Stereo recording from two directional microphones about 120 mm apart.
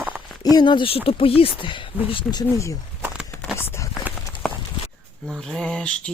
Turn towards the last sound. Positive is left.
turn(degrees=10)  # may be behind; listen again after turning